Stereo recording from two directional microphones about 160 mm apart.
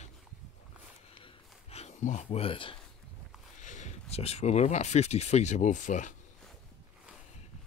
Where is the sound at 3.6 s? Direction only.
50° left (ahead or behind).